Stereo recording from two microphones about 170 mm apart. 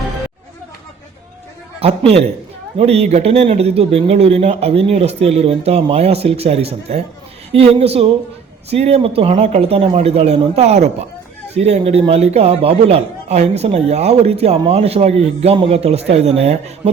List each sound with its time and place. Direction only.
1.8 s speech: 35° right (ahead or behind)